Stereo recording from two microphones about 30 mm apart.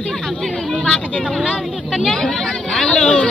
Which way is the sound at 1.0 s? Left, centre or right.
Left.